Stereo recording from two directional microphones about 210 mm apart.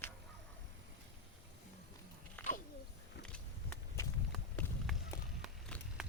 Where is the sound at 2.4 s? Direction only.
10° left (ahead or behind).